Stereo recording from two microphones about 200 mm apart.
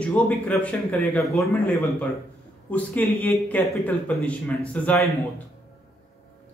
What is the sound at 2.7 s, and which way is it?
Speech, 10° left (ahead or behind).